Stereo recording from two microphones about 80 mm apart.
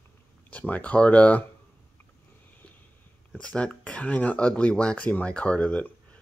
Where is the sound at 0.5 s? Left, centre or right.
Centre.